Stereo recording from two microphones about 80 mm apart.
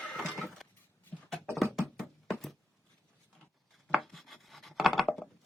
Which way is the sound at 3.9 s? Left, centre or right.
Centre.